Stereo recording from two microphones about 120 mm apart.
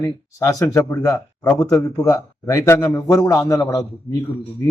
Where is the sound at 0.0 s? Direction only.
20° left (ahead or behind).